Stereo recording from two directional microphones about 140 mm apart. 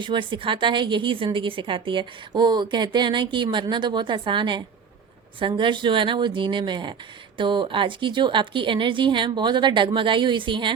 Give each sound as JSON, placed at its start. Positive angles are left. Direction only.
{"t": 0.0, "sound": "a woman's voice", "side_deg": -35}